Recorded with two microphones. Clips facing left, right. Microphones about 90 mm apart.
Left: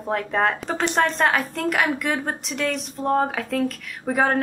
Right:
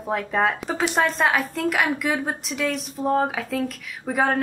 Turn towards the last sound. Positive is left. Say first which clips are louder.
# left 1 dB
turn(degrees=0)  # may be behind; listen again after turning